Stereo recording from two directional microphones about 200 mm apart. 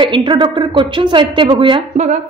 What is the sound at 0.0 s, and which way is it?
A woman's voice, 25° right (ahead or behind).